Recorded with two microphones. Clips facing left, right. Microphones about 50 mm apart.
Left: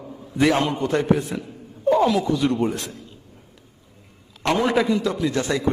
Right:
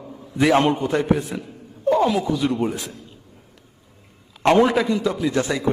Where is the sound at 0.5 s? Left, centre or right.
Right.